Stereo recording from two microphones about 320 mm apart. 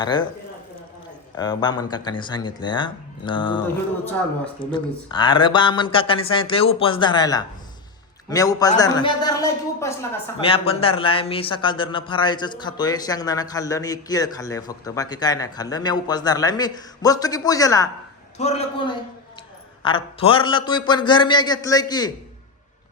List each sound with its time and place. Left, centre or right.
0.0 s a man's voice: centre
1.4 s a man's voice: centre
4.6 s a man's voice: centre